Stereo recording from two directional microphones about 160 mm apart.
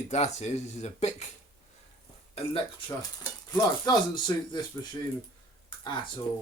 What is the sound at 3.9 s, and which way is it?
Speech, 25° left (ahead or behind).